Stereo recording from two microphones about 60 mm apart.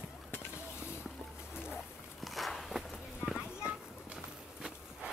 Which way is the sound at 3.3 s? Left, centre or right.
Centre.